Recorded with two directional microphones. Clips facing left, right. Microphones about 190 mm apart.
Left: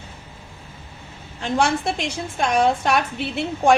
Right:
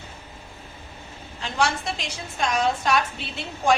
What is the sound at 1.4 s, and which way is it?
A woman's voice, 55° left (ahead or behind).